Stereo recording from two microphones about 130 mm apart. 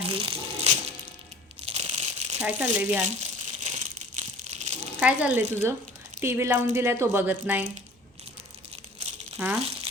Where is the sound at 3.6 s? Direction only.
65° right (ahead or behind).